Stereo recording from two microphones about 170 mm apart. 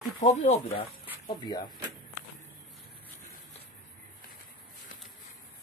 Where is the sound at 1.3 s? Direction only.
25° left (ahead or behind).